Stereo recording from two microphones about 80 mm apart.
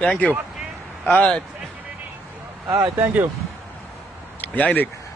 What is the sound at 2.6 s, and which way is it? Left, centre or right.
Speech, right.